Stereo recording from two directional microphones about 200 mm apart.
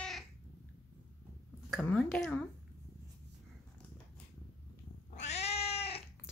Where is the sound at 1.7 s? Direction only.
5° left (ahead or behind).